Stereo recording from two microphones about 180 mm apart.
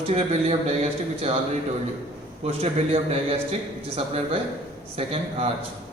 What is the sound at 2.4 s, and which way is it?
Speech, 35° right (ahead or behind).